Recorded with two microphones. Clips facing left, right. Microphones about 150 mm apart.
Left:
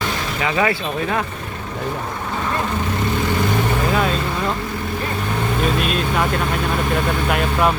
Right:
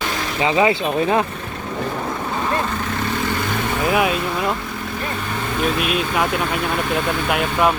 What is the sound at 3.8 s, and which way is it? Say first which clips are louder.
Speech: right 1 dB; 15° right (ahead or behind).